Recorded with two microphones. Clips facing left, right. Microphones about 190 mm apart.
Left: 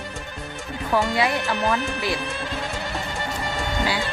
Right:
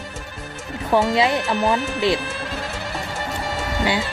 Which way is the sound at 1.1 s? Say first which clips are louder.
Right 4 dB; 25° right (ahead or behind).